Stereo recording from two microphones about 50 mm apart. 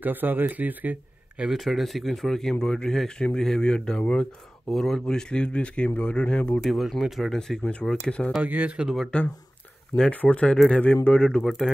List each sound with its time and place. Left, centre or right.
0.0 s speech: right
1.5 s speech: centre
5.0 s a man's voice: centre
7.0 s speech: centre
7.2 s speech: centre
8.4 s speech: right
8.8 s speech: centre
9.9 s a man's voice: left
11.1 s speech: centre
11.4 s speech: centre